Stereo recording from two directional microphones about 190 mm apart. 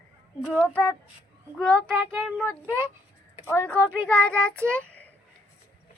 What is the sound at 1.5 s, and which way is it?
A woman's voice, centre (ahead or behind).